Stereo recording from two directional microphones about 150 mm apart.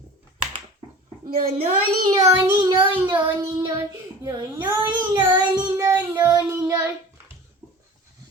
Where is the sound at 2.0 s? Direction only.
25° right (ahead or behind).